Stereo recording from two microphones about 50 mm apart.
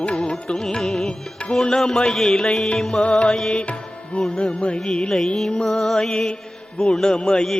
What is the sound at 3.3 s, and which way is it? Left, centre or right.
Music, centre.